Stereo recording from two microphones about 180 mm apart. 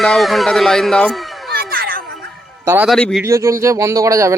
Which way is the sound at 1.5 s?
55° right (ahead or behind).